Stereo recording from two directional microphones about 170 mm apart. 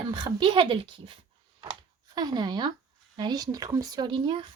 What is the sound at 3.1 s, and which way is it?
Speech, 25° right (ahead or behind).